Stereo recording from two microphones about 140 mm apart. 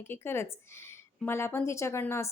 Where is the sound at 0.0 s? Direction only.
15° left (ahead or behind).